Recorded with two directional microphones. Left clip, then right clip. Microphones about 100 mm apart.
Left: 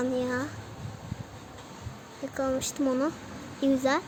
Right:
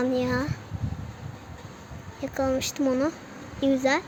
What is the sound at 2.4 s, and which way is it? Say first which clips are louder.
Speech: right 3 dB; 20° right (ahead or behind).